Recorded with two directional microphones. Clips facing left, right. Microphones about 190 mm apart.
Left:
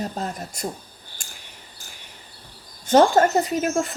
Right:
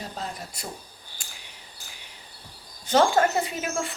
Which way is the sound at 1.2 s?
45° left (ahead or behind).